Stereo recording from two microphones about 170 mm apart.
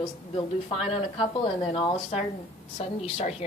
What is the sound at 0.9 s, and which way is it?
A woman's voice, 30° left (ahead or behind).